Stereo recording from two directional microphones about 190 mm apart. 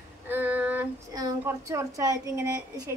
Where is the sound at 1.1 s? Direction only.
20° right (ahead or behind).